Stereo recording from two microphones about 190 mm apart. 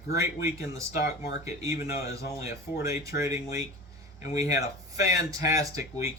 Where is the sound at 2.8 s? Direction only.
15° right (ahead or behind).